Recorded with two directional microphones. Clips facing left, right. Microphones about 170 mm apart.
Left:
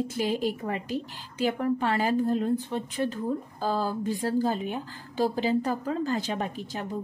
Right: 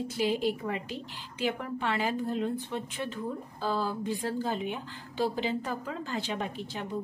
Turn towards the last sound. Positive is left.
turn(degrees=40)  # may be behind; listen again after turning